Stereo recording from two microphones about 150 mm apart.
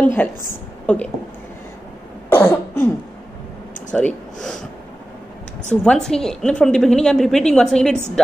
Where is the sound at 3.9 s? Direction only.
10° left (ahead or behind).